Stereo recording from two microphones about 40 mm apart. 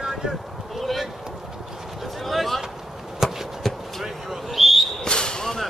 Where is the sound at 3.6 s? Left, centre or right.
Centre.